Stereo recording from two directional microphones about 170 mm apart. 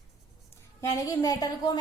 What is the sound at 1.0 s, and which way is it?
Speech, 20° left (ahead or behind).